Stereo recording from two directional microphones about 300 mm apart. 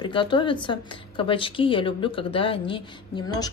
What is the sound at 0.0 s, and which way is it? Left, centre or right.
A woman's voice, centre.